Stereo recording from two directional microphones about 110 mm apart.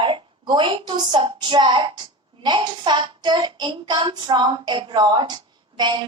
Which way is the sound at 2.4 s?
45° right (ahead or behind).